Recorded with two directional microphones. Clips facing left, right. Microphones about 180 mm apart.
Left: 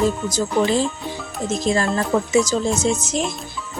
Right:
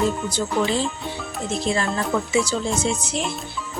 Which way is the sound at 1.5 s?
40° left (ahead or behind).